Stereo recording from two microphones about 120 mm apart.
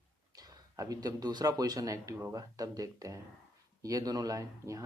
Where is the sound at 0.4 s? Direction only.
30° right (ahead or behind).